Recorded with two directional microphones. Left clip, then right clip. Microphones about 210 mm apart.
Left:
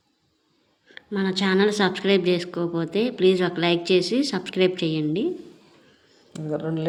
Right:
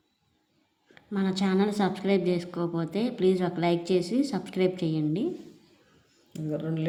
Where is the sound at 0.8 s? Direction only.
15° right (ahead or behind).